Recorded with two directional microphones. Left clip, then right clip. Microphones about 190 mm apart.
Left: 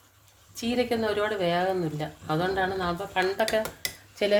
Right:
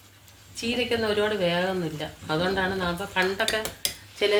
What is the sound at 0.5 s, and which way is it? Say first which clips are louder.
Speech: right 1 dB; 60° left (ahead or behind).